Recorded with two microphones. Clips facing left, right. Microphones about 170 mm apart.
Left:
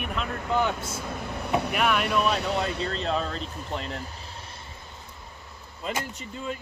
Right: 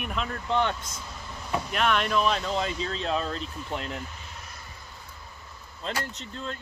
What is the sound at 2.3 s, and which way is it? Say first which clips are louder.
Speech: left 2 dB; 70° left (ahead or behind).